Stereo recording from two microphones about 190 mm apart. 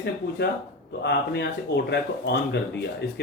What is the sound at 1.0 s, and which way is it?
Speech, 60° left (ahead or behind).